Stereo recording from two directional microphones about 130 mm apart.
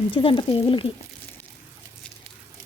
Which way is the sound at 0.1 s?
40° left (ahead or behind).